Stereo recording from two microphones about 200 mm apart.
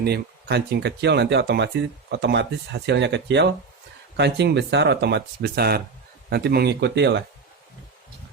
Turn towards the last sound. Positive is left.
turn(degrees=-55)  # may be behind; listen again after turning